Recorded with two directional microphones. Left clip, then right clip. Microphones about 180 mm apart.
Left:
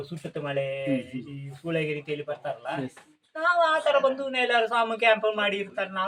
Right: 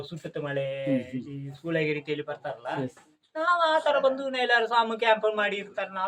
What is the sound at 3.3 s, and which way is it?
A woman's voice, 20° right (ahead or behind).